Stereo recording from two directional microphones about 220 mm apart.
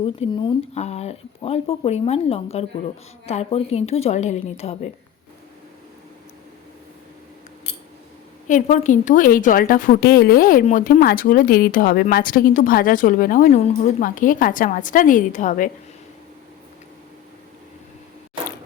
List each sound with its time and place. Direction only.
0.0 s speech: 25° left (ahead or behind)
8.4 s a woman's voice: 35° left (ahead or behind)